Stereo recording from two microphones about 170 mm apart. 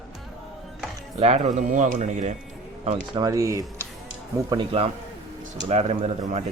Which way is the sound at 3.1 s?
20° right (ahead or behind).